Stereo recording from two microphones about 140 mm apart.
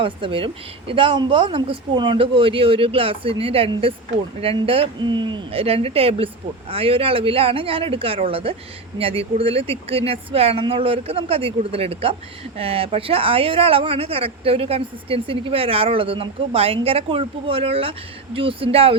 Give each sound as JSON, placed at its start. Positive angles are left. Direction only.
{"t": 0.0, "sound": "speech", "side_deg": -40}